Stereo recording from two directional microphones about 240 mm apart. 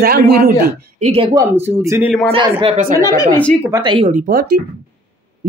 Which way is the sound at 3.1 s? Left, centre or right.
Centre.